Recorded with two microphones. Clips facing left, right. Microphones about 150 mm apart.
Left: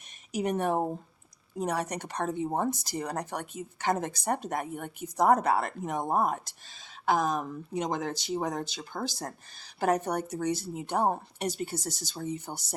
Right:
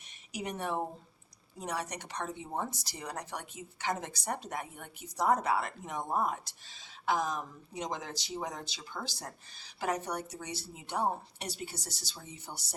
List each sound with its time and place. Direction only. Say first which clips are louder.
0.3 s a woman's voice: left 7 dB; 50° left (ahead or behind)